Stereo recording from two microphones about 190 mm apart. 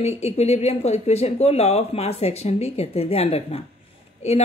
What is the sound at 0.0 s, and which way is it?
Speech, 35° left (ahead or behind).